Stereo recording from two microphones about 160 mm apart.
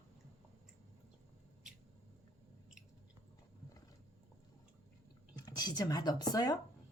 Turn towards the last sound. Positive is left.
turn(degrees=25)  # may be behind; listen again after turning